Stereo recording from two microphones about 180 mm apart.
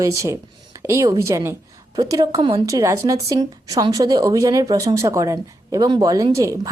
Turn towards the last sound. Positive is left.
turn(degrees=-15)  # may be behind; listen again after turning